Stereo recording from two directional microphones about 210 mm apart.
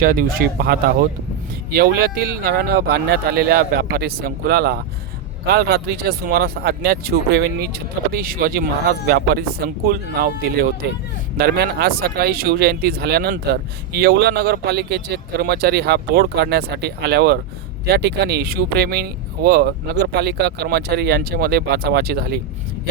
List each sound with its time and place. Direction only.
0.0 s speech: 45° right (ahead or behind)